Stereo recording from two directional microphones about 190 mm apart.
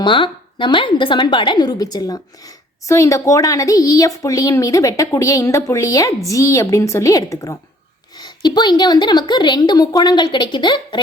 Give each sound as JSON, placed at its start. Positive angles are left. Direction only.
{"t": 0.0, "sound": "a woman's voice", "side_deg": 25}